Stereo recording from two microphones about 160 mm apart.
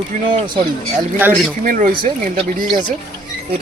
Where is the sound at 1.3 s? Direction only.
55° right (ahead or behind).